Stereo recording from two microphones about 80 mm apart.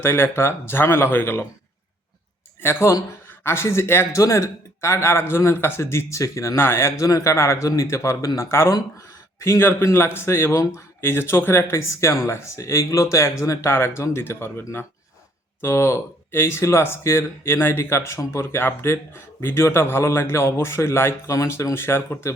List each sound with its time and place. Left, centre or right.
0.0 s speech: left
2.6 s speech: left